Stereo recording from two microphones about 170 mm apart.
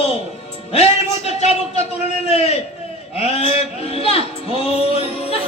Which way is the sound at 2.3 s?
40° left (ahead or behind).